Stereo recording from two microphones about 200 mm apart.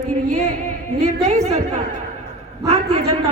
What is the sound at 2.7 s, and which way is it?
Speech, 30° right (ahead or behind).